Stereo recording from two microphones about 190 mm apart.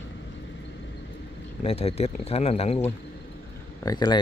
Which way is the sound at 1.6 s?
30° left (ahead or behind).